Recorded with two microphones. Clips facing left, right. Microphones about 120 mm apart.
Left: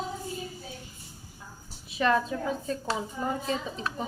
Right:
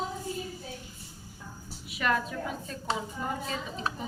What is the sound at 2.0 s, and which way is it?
Speech, 30° left (ahead or behind).